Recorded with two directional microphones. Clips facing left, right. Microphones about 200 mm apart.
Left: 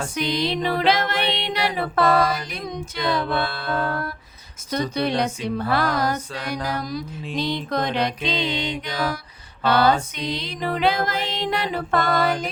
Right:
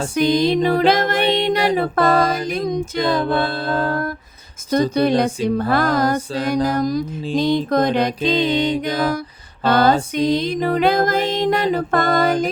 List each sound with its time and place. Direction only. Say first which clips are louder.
0.1 s music: right 10 dB; 45° right (ahead or behind)
3.4 s music: right 5 dB; 30° right (ahead or behind)
4.7 s music: right 7 dB; 45° right (ahead or behind)
6.7 s mantra: right 8 dB; 45° right (ahead or behind)
7.3 s music: right 8 dB; 50° right (ahead or behind)